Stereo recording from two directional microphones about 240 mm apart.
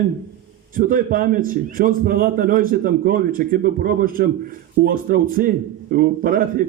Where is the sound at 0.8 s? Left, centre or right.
Right.